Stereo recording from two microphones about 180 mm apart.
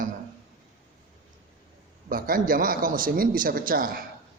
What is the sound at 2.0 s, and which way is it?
A man's voice, 50° right (ahead or behind).